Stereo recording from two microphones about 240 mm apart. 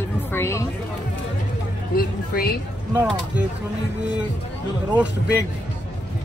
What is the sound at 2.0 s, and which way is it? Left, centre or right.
Speech, left.